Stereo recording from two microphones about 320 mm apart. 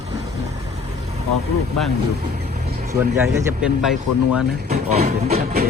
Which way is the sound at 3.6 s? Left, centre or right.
Centre.